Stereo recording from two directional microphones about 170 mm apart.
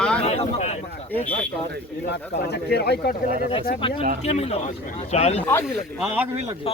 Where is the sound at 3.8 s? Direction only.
30° left (ahead or behind).